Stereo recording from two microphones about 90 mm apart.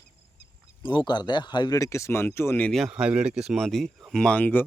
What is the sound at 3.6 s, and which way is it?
Speech, 5° left (ahead or behind).